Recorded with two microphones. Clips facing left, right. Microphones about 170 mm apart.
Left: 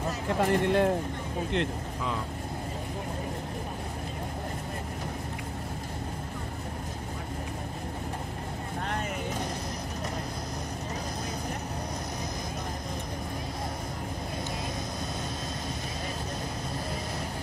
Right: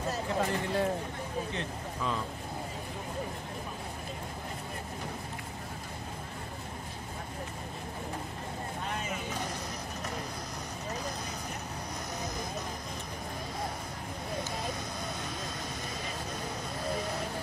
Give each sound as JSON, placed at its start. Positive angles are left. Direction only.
{"t": 0.4, "sound": "speech", "side_deg": 60}